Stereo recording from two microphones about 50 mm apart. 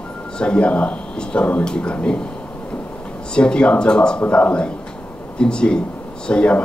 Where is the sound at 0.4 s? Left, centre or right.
Left.